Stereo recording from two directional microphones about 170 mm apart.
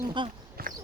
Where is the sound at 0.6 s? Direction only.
60° right (ahead or behind).